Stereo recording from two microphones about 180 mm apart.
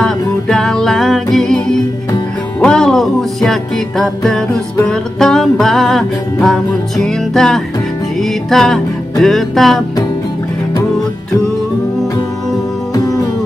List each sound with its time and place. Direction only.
0.0 s music: 5° left (ahead or behind)
2.6 s speech: 5° left (ahead or behind)
4.0 s music: 5° left (ahead or behind)
12.9 s music: 20° left (ahead or behind)